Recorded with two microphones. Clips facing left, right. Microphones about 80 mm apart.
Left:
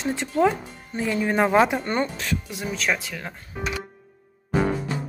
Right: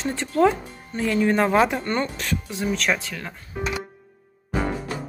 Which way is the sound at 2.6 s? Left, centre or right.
Centre.